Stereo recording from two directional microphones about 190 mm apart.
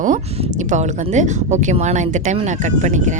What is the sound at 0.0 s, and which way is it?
Speech, 40° right (ahead or behind).